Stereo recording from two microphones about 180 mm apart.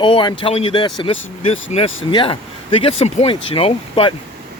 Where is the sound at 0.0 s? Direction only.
25° left (ahead or behind).